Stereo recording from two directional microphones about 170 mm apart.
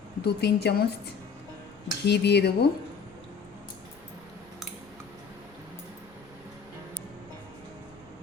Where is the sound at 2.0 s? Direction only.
80° left.